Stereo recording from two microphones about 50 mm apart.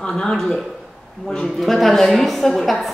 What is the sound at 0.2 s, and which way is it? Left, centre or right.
Speech, centre.